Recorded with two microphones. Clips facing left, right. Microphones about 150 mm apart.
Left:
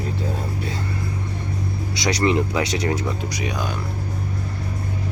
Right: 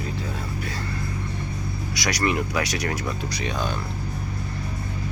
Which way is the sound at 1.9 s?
25° left (ahead or behind).